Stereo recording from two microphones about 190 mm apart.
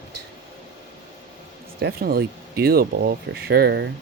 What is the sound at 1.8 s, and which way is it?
Speech, 55° right (ahead or behind).